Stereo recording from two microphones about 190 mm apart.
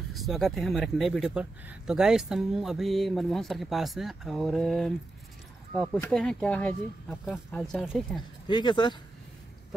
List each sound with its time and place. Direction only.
0.1 s speech: centre (ahead or behind)
5.9 s speech: 5° left (ahead or behind)
8.5 s speech: 25° left (ahead or behind)